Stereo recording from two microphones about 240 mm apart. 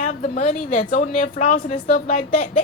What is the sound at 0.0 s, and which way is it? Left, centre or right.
Speech, left.